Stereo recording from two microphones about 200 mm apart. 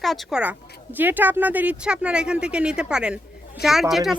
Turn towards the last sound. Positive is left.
turn(degrees=0)  # may be behind; listen again after turning